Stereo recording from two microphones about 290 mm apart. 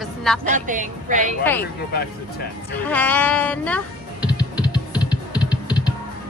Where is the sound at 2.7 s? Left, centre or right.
Centre.